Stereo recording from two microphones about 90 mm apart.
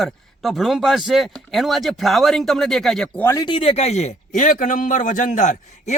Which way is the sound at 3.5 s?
85° left.